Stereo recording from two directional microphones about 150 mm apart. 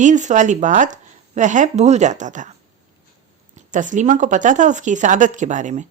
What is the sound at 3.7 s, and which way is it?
Speech, 55° right (ahead or behind).